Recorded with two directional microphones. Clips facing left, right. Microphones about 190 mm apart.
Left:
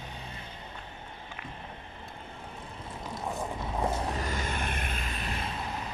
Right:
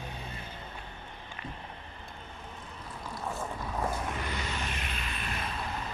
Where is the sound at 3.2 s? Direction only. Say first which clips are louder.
Left 2 dB; 20° left (ahead or behind); by 5.2 s 45° left (ahead or behind).